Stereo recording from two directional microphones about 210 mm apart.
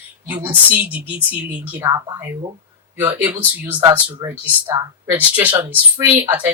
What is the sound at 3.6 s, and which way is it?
Speech, 10° right (ahead or behind).